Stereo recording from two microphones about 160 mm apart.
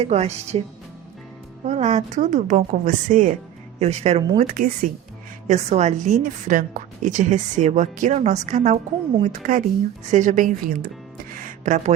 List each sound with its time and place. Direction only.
0.0 s a woman's voice: 45° right (ahead or behind)
1.6 s a woman's voice: 45° right (ahead or behind)
3.8 s a woman's voice: 45° right (ahead or behind)
4.4 s speech: 60° right (ahead or behind)
5.5 s a woman's voice: 40° right (ahead or behind)
11.3 s music: 55° right (ahead or behind)